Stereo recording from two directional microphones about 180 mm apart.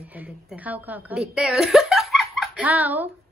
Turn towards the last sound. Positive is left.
turn(degrees=-10)  # may be behind; listen again after turning